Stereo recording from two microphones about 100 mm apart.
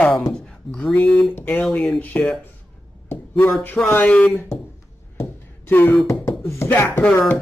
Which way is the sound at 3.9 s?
15° left (ahead or behind).